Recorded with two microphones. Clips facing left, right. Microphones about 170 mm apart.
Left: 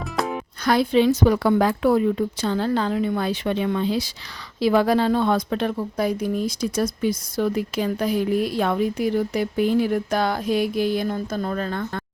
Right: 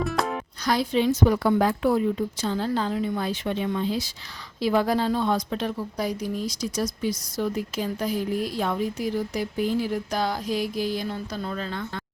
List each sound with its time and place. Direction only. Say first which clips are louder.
0.2 s music: left 5 dB; centre (ahead or behind)
0.6 s a woman's voice: left 5 dB; 60° left (ahead or behind)